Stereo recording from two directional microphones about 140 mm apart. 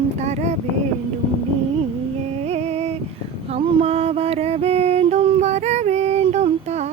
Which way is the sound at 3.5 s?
45° right (ahead or behind).